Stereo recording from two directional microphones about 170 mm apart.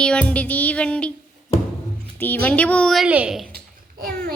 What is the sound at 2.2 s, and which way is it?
A woman's voice, 10° left (ahead or behind).